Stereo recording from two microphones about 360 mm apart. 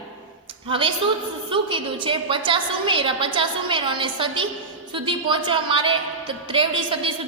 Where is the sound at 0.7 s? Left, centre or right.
Centre.